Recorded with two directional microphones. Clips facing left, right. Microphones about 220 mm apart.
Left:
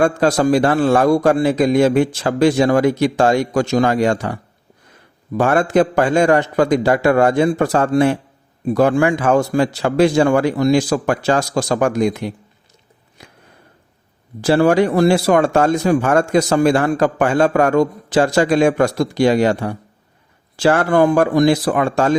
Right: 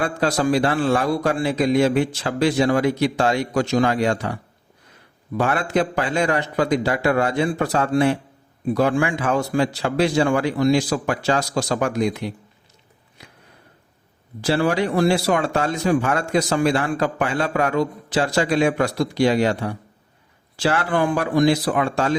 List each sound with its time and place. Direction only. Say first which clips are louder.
0.0 s speech: left 6 dB; 45° left (ahead or behind)
5.4 s speech: left 6 dB; 45° left (ahead or behind)
13.2 s a sound: left 3 dB; 45° left (ahead or behind)
14.4 s speech: left 7 dB; 50° left (ahead or behind)